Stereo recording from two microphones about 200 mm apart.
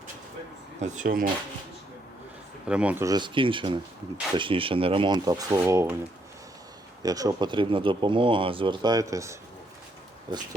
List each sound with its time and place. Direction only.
0.8 s speech: 40° right (ahead or behind)
2.6 s speech: 5° right (ahead or behind)
7.0 s speech: 20° right (ahead or behind)